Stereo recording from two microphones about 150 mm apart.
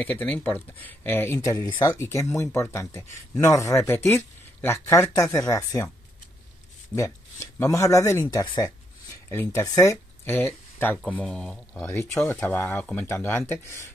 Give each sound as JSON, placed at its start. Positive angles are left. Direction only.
{"t": 0.0, "sound": "speech", "side_deg": 10}
{"t": 7.0, "sound": "speech", "side_deg": 20}
{"t": 11.8, "sound": "speech", "side_deg": 15}